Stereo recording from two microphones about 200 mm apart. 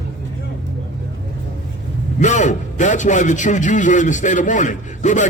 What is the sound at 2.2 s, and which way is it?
A man's voice, 40° left (ahead or behind).